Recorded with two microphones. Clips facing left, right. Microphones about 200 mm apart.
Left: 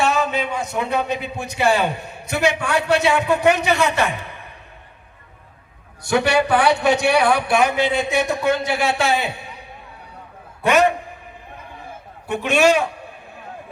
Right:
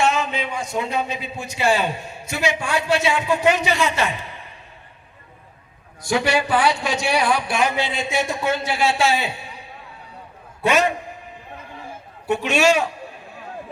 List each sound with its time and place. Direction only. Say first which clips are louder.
0.3 s a man's voice: left 2 dB; 50° left (ahead or behind)
6.1 s a man's voice: left 3 dB; 65° left (ahead or behind)
10.7 s a man's voice: left 3 dB; 55° left (ahead or behind)
12.3 s a man's voice: left 1 dB; 55° left (ahead or behind)